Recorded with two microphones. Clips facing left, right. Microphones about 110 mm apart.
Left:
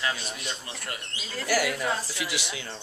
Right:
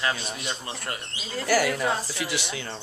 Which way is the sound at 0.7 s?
25° right (ahead or behind).